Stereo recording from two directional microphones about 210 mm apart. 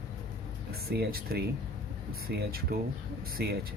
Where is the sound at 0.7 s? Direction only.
50° right (ahead or behind).